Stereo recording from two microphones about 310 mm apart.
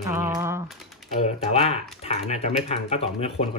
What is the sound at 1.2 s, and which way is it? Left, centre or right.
Speech, centre.